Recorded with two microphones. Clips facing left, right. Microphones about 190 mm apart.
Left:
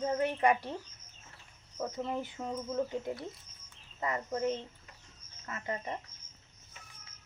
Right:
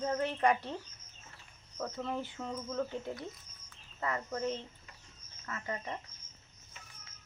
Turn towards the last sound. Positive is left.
turn(degrees=20)  # may be behind; listen again after turning